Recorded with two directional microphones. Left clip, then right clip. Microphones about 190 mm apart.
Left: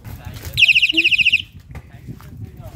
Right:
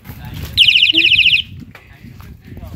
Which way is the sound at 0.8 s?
40° left (ahead or behind).